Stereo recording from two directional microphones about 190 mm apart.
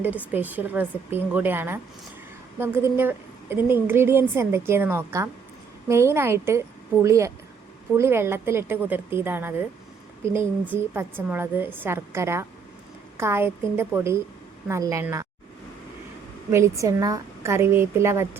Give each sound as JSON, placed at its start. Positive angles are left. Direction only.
{"t": 0.3, "sound": "a woman's voice", "side_deg": -10}
{"t": 16.5, "sound": "a woman's voice", "side_deg": -15}